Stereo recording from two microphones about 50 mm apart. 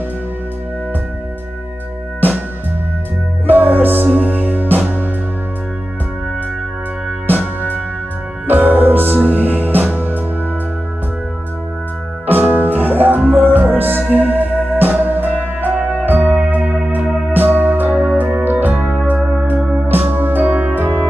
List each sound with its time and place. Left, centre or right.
3.4 s music: right
7.2 s music: right
12.3 s music: right
19.6 s music: centre
19.9 s music: right